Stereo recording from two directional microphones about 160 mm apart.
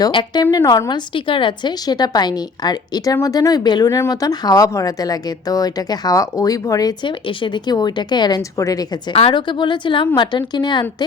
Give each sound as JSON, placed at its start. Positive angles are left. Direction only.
{"t": 0.0, "sound": "a woman's voice", "side_deg": 30}
{"t": 9.1, "sound": "a woman's voice", "side_deg": 35}